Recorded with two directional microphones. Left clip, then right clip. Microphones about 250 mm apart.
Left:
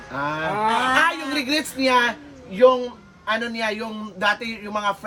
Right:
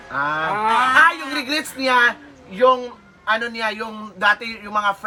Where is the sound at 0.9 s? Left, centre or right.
Centre.